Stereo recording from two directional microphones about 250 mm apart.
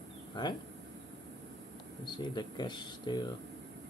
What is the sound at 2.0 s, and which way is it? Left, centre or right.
Speech, centre.